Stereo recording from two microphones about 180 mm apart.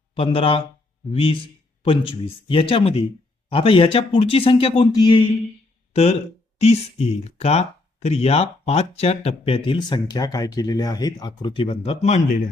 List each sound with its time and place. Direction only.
0.1 s speech: 30° left (ahead or behind)